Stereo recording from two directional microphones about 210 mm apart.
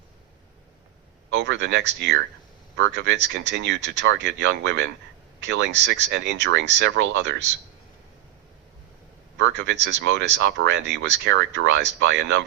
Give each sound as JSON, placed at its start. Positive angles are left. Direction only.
{"t": 1.4, "sound": "speech", "side_deg": -60}
{"t": 9.4, "sound": "speech", "side_deg": -60}